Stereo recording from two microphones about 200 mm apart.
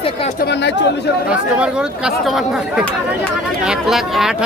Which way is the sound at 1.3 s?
5° right (ahead or behind).